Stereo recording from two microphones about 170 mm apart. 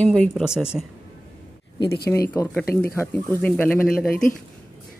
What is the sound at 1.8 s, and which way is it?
Speech, 70° left (ahead or behind).